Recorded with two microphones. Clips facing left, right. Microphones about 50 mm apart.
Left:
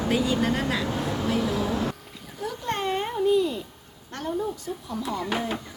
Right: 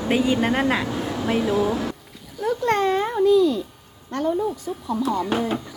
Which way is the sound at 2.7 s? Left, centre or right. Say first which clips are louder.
Right 7 dB; right.